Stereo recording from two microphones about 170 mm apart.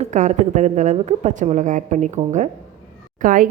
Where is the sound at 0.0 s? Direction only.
45° right (ahead or behind).